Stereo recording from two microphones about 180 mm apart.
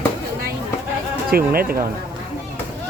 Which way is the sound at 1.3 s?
55° right (ahead or behind).